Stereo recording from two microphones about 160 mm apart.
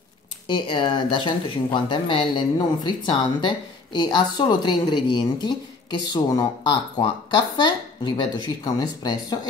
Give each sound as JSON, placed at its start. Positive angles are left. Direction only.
{"t": 0.5, "sound": "speech", "side_deg": 30}